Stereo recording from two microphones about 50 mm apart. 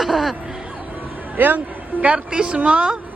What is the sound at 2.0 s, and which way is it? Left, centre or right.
Speech, right.